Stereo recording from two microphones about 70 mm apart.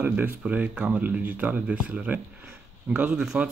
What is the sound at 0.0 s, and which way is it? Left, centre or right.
Speech, right.